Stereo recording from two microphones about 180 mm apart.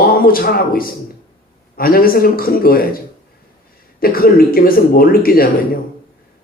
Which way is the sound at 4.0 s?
55° left (ahead or behind).